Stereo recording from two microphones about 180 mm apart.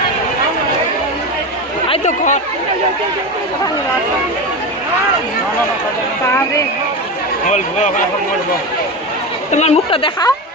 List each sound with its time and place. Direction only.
1.9 s speech: 40° left (ahead or behind)
7.4 s a man's voice: 45° left (ahead or behind)
9.5 s a woman's voice: 40° left (ahead or behind)